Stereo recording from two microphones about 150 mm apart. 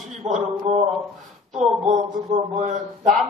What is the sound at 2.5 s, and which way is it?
Speech, 50° right (ahead or behind).